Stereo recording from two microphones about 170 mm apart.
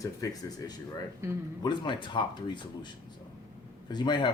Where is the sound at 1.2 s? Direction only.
15° right (ahead or behind).